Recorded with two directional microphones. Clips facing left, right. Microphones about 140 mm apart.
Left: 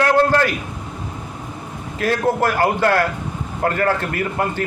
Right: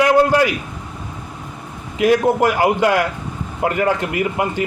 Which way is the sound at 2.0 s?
15° right (ahead or behind).